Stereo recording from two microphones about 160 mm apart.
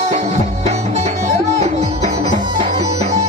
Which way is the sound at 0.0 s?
45° right (ahead or behind).